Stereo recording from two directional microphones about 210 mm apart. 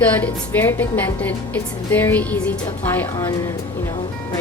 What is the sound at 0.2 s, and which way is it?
A woman's voice, 10° left (ahead or behind).